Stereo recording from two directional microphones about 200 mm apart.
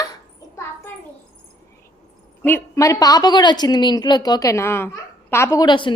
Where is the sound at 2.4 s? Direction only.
10° left (ahead or behind).